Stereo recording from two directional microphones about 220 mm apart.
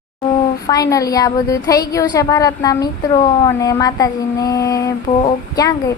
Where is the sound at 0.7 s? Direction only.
15° left (ahead or behind).